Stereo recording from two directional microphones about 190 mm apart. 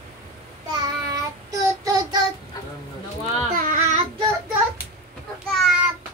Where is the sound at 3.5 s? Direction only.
45° right (ahead or behind).